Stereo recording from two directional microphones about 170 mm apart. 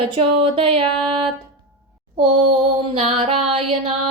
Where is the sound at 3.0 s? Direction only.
35° right (ahead or behind).